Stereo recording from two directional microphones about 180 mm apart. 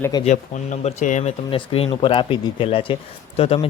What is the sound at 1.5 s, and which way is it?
A man's voice, 30° left (ahead or behind).